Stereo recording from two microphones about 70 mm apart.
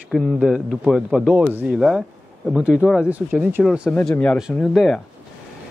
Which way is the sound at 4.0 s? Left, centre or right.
Centre.